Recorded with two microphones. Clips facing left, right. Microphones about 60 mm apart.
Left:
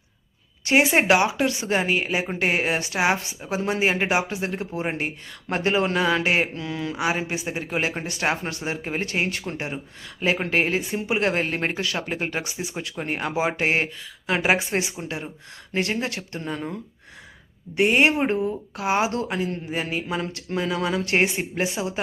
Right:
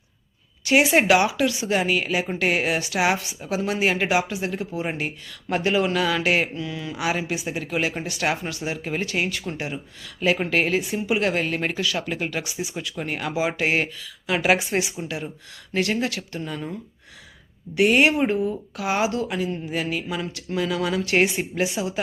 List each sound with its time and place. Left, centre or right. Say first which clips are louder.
0.6 s speech: right 1 dB; left
6.5 s speech: left 1 dB; left
6.9 s speech: right 1 dB; left
10.2 s speech: right 1 dB; left
17.7 s speech: right 1 dB; left